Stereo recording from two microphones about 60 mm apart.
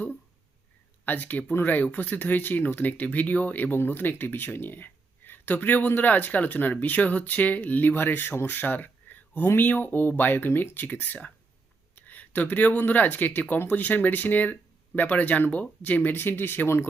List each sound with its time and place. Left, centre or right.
1.0 s speech: left
11.9 s a sound: left
12.8 s speech: left